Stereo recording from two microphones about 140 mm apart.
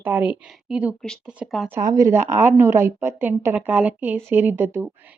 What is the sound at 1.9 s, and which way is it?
Speech, 20° right (ahead or behind).